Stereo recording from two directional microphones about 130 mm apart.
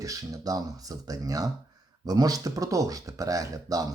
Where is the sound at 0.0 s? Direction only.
25° right (ahead or behind).